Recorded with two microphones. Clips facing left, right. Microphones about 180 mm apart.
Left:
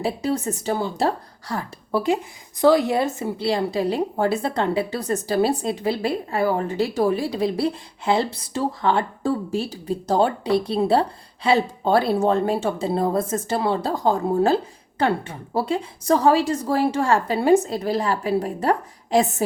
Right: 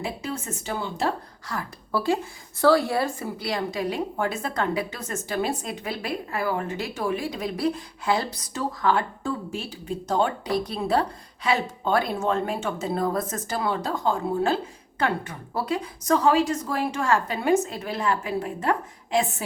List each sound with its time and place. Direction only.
0.0 s a woman's voice: 35° left (ahead or behind)